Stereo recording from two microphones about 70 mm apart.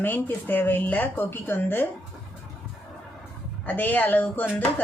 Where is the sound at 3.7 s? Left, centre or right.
Left.